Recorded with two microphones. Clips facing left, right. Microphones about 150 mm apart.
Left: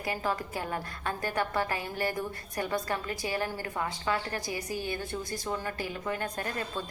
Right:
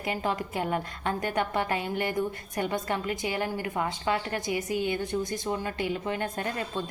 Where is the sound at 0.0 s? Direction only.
20° right (ahead or behind).